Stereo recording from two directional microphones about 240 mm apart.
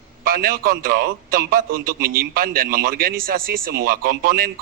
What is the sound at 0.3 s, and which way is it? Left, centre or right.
A man's voice, right.